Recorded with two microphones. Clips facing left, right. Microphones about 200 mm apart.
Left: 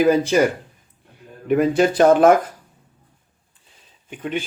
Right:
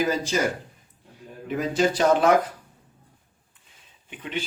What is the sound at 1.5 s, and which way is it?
Speech, 60° left (ahead or behind).